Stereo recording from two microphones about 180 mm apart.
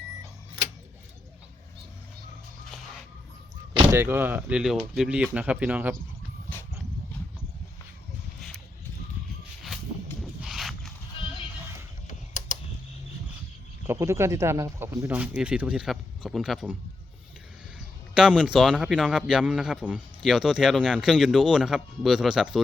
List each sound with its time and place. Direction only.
3.9 s speech: 10° right (ahead or behind)
10.2 s a sound: centre (ahead or behind)
12.0 s typing: 40° left (ahead or behind)
13.8 s a man's voice: 15° right (ahead or behind)
18.1 s a man's voice: 5° right (ahead or behind)